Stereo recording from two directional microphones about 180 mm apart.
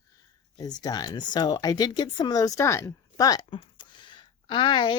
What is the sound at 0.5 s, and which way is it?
Speech, 20° left (ahead or behind).